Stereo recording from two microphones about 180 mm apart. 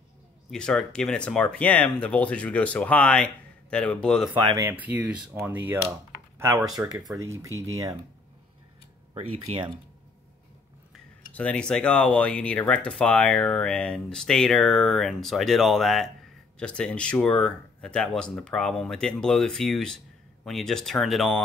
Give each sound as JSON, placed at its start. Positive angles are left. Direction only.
{"t": 0.5, "sound": "speech", "side_deg": 5}
{"t": 4.6, "sound": "speech", "side_deg": -10}
{"t": 9.1, "sound": "speech", "side_deg": -30}
{"t": 11.3, "sound": "speech", "side_deg": 5}